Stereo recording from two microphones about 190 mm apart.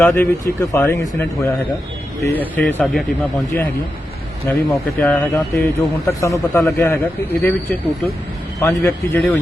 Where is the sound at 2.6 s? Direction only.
10° left (ahead or behind).